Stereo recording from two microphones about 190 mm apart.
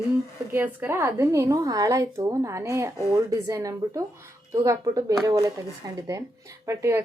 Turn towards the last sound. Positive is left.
turn(degrees=-15)  # may be behind; listen again after turning